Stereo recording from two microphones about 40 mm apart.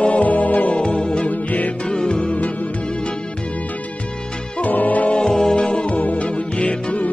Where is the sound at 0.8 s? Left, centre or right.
Left.